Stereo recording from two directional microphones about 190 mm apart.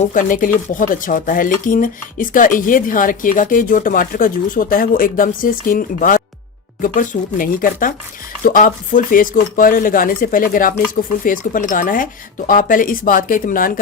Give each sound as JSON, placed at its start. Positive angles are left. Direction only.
{"t": 0.0, "sound": "speech", "side_deg": 45}